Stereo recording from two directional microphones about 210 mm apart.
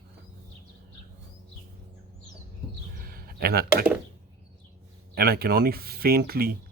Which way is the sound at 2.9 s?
45° right (ahead or behind).